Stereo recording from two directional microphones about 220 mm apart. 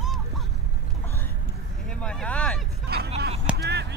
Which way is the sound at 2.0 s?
5° left (ahead or behind).